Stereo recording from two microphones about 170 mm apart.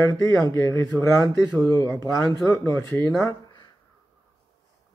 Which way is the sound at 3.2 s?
25° left (ahead or behind).